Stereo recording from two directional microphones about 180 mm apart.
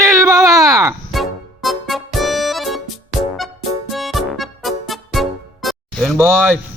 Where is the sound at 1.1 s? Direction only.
Centre (ahead or behind).